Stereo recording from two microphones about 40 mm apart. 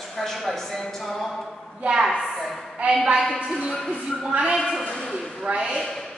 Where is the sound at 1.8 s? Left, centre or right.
Right.